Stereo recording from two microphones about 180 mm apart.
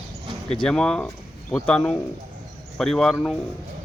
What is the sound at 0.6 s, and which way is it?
Speech, 5° left (ahead or behind).